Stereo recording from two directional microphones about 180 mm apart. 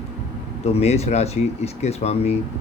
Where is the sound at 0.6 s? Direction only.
35° left (ahead or behind).